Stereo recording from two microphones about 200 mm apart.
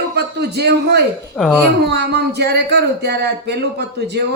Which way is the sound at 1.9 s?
55° right (ahead or behind).